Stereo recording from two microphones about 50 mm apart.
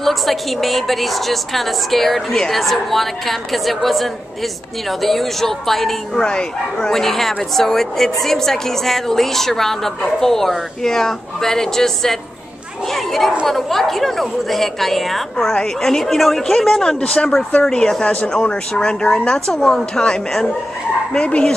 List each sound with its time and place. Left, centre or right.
0.0 s a woman's voice: centre
17.0 s speech: left
18.0 s speech: left